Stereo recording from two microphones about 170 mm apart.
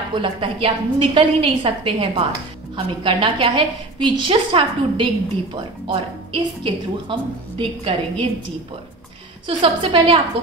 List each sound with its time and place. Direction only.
0.1 s a woman's voice: 30° right (ahead or behind)
9.5 s a woman's voice: 30° right (ahead or behind)